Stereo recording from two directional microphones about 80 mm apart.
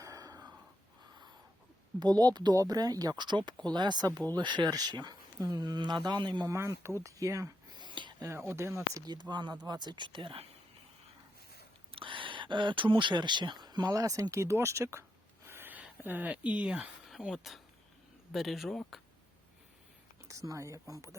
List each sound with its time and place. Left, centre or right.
0.0 s a sound: right
2.0 s speech: right
5.4 s speech: right
6.6 s speech: right
7.7 s a sound: right
8.3 s speech: right
9.3 s speech: right
12.0 s speech: right
13.8 s speech: right
15.4 s a sound: right
16.0 s speech: right; by 18.8 s centre
20.2 s speech: right